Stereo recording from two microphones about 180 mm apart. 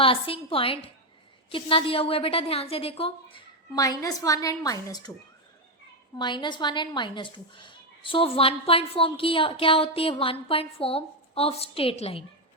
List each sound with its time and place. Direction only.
0.0 s speech: 30° left (ahead or behind)
3.8 s a woman's voice: 20° left (ahead or behind)
6.1 s speech: 25° left (ahead or behind)